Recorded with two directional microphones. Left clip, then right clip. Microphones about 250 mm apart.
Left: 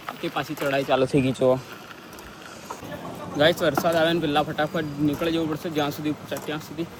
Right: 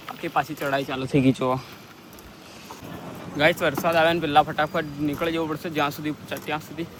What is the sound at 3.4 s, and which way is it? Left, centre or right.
Speech, centre.